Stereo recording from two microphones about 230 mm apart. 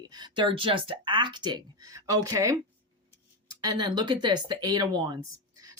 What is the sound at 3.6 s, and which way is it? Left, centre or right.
Speech, centre.